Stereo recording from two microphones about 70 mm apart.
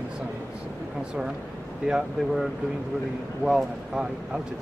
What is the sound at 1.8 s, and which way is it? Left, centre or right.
Speech, centre.